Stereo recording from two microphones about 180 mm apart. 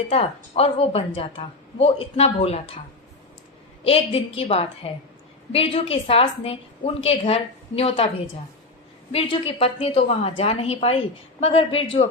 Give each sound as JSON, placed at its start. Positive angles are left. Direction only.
{"t": 0.1, "sound": "a woman's voice", "side_deg": 35}
{"t": 3.8, "sound": "a woman's voice", "side_deg": 30}
{"t": 9.1, "sound": "a woman's voice", "side_deg": 30}